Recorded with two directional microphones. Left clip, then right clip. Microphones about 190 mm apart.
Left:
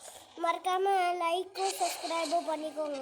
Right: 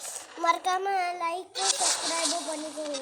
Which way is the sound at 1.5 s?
45° right (ahead or behind).